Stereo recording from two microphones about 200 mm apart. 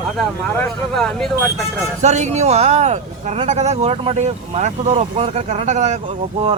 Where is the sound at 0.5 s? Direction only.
5° left (ahead or behind).